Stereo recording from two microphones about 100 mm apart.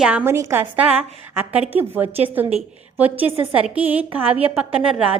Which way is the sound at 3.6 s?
15° right (ahead or behind).